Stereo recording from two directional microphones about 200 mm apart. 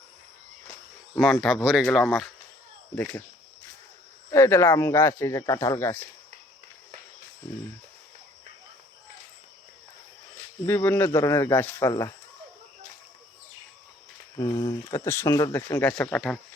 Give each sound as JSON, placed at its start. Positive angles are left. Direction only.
{"t": 1.1, "sound": "speech", "side_deg": 0}
{"t": 4.3, "sound": "speech", "side_deg": 15}
{"t": 10.7, "sound": "speech", "side_deg": 10}
{"t": 14.3, "sound": "speech", "side_deg": 20}
{"t": 15.0, "sound": "speech", "side_deg": 10}